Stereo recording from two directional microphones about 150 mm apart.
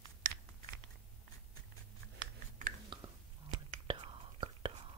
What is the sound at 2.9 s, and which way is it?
Whispering, 35° right (ahead or behind).